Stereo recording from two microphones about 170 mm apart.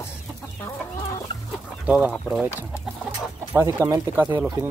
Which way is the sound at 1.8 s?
10° right (ahead or behind).